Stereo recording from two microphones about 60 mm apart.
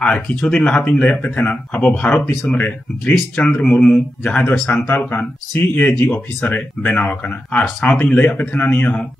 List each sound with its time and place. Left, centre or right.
0.0 s speech: centre